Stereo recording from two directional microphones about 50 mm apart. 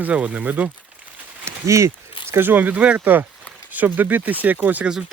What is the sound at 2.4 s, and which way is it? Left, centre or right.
Speech, right.